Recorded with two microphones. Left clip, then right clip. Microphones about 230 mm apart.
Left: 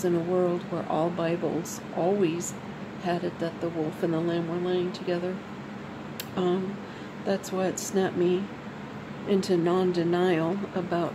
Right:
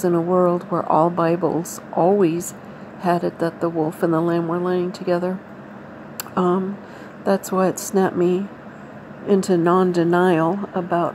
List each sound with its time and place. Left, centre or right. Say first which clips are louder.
0.0 s speech: right 8 dB; centre
6.3 s speech: right 8 dB; centre